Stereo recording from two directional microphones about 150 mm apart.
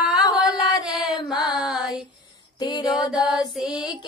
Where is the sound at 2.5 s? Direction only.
30° left (ahead or behind).